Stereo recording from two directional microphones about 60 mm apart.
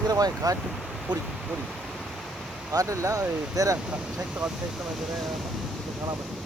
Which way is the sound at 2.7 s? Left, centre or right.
Right.